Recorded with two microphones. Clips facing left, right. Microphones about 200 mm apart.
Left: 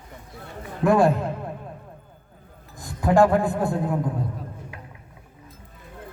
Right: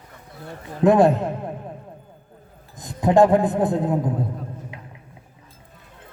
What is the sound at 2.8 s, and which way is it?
A man's voice, 20° right (ahead or behind).